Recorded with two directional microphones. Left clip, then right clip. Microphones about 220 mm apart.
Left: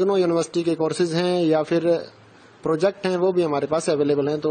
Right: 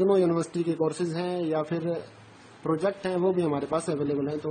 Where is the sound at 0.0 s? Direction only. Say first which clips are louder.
Left 3 dB; 25° left (ahead or behind).